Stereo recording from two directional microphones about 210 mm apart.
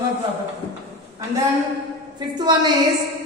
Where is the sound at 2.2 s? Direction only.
20° right (ahead or behind).